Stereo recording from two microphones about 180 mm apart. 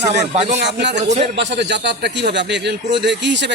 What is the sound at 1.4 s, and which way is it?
A man's voice, 70° right (ahead or behind).